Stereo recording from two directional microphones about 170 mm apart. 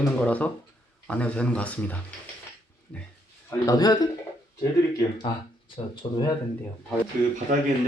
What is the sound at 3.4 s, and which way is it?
Speech, 20° left (ahead or behind).